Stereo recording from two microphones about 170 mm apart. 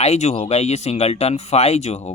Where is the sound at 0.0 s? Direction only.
40° left (ahead or behind).